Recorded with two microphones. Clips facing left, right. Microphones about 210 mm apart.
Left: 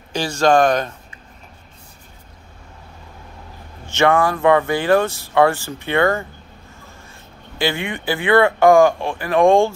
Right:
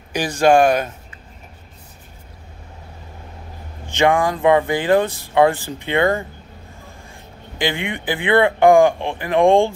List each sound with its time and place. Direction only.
0.1 s speech: 15° right (ahead or behind)
3.8 s speech: 15° right (ahead or behind)
7.5 s speech: 15° right (ahead or behind)